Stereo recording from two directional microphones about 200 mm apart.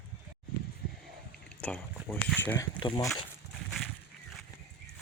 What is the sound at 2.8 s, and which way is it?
Speech, 20° left (ahead or behind).